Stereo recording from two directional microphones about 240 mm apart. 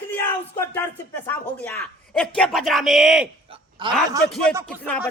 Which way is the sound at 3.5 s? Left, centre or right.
Centre.